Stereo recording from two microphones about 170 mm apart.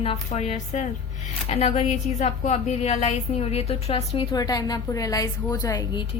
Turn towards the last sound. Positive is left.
turn(degrees=25)  # may be behind; listen again after turning